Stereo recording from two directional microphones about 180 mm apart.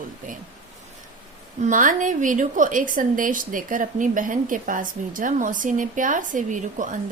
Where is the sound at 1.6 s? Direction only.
45° right (ahead or behind).